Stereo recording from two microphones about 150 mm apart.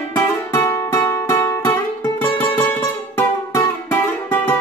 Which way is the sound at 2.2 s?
10° left (ahead or behind).